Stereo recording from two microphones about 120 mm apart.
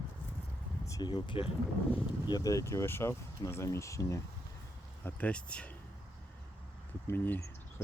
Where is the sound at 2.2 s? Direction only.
35° left (ahead or behind).